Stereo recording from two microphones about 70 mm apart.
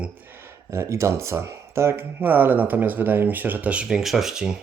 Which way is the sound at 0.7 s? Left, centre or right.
Right.